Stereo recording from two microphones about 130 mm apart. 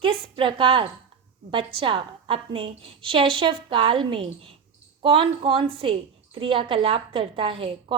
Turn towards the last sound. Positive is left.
turn(degrees=-45)  # may be behind; listen again after turning